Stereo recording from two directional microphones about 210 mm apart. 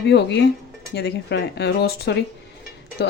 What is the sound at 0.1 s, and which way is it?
Speech, 55° left (ahead or behind).